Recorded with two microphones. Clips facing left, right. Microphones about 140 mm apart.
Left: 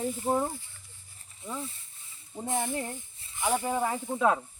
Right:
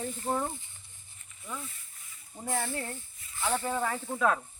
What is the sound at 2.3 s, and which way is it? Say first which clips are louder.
Speech: left 2 dB; 20° left (ahead or behind).